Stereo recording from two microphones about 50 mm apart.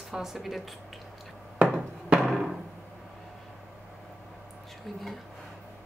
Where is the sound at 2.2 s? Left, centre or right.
Centre.